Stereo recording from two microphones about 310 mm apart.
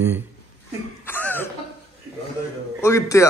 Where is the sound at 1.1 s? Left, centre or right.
Centre.